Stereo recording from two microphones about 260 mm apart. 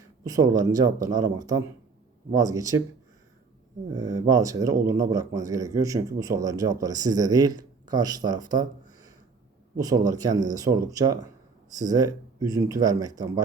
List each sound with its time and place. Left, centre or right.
0.3 s speech: centre
3.9 s speech: centre